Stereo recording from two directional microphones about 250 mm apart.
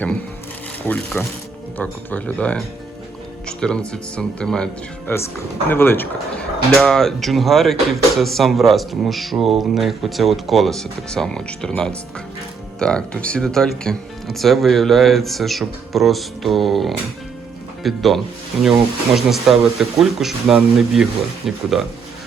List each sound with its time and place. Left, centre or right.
1.2 s speech: centre